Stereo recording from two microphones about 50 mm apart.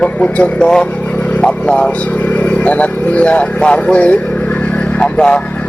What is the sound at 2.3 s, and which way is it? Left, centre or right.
Speech, left.